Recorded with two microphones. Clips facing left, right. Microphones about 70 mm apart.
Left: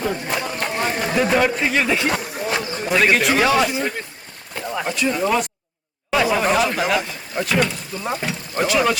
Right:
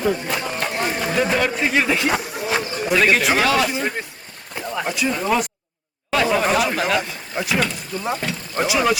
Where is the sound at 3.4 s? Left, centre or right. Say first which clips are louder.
Left 1 dB; centre.